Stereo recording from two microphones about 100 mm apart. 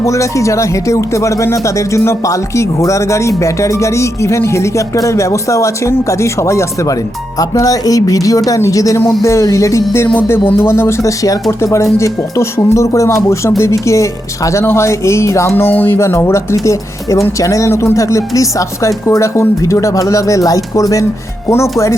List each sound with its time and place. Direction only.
0.0 s speech: 30° left (ahead or behind)